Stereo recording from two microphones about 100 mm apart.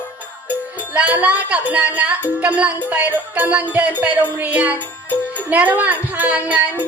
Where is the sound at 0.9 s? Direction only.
15° right (ahead or behind).